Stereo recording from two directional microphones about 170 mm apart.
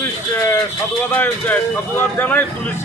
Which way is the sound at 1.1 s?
10° left (ahead or behind).